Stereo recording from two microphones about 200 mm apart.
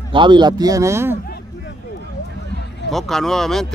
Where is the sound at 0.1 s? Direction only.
25° right (ahead or behind).